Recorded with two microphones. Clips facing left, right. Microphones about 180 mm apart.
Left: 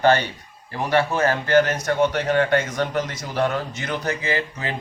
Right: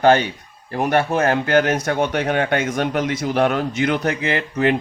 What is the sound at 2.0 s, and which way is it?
Speech, 60° right (ahead or behind).